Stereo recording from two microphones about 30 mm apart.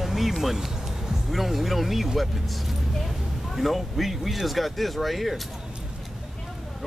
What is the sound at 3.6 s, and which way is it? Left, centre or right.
Speech, centre.